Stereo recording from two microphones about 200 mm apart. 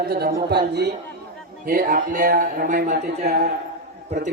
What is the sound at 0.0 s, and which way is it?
A man's voice, 50° right (ahead or behind).